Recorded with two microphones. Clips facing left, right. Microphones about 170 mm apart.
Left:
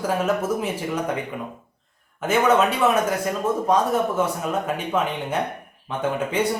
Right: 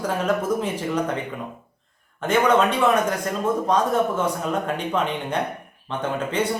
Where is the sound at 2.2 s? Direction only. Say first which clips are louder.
Even; 5° left (ahead or behind).